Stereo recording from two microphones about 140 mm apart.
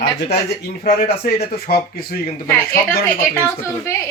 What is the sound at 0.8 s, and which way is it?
A man's voice, 90° left.